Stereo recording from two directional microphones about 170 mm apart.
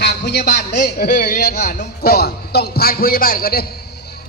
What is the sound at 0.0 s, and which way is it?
Speech, 75° left (ahead or behind).